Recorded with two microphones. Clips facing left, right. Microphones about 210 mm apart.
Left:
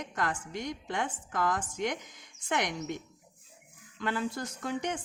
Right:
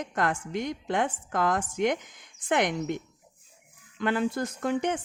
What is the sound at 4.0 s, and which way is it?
Speech, 60° right (ahead or behind).